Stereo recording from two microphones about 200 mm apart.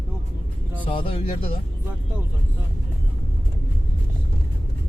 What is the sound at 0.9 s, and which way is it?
Speech, 25° left (ahead or behind).